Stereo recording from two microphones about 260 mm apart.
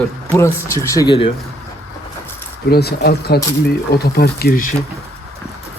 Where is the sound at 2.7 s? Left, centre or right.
Left.